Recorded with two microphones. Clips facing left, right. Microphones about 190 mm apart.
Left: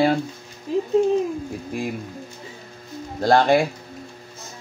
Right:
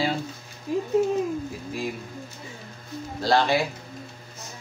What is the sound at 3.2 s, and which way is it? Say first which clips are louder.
Speech: left 5 dB; 50° left (ahead or behind).